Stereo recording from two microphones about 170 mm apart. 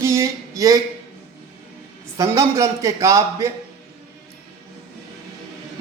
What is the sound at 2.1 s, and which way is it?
Speech, 15° right (ahead or behind).